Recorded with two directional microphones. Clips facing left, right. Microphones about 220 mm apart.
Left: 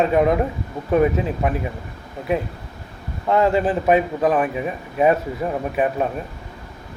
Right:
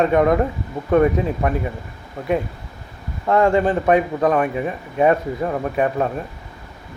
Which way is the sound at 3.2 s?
Centre (ahead or behind).